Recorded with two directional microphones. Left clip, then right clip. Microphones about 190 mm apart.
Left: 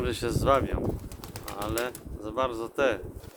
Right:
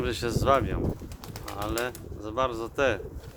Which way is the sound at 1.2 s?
40° left (ahead or behind).